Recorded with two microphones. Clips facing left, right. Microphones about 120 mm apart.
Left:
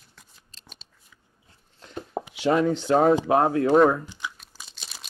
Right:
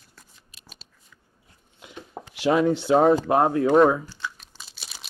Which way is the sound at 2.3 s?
Centre (ahead or behind).